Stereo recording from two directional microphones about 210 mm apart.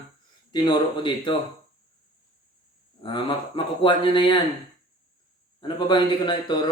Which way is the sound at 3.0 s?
20° left (ahead or behind).